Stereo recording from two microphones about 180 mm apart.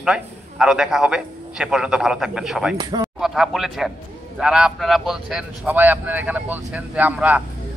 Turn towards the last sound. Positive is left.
turn(degrees=-10)  # may be behind; listen again after turning